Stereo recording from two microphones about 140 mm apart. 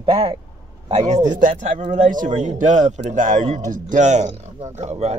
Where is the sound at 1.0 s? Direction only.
55° right (ahead or behind).